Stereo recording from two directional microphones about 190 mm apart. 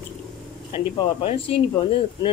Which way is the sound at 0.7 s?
30° left (ahead or behind).